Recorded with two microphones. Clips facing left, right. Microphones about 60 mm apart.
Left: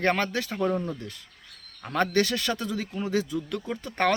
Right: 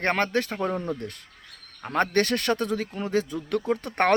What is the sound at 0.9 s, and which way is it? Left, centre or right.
Speech, right.